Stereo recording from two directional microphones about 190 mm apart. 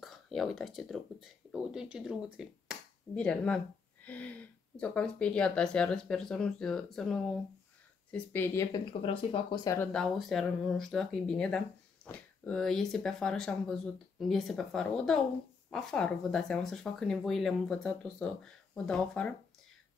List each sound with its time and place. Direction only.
0.0 s speech: centre (ahead or behind)
8.7 s speech: 30° left (ahead or behind)
9.8 s speech: 5° left (ahead or behind)